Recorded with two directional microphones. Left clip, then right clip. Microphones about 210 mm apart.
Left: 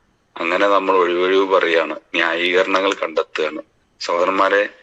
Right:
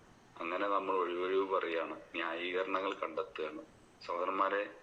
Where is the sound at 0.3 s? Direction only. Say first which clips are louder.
Left 19 dB; 55° left (ahead or behind).